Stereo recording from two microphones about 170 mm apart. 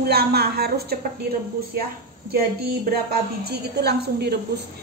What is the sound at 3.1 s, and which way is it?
Speech, 70° right (ahead or behind).